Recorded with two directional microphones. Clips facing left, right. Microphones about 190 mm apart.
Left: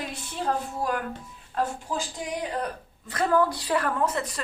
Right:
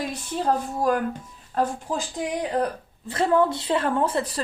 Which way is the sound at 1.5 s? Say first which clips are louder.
Right 4 dB; 40° right (ahead or behind).